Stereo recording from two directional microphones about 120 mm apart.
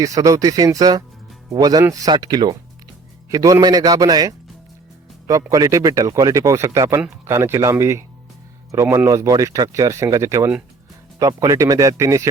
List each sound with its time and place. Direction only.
0.0 s a man's voice: 30° right (ahead or behind)